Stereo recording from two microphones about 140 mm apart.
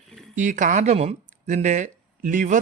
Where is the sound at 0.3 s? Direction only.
65° right (ahead or behind).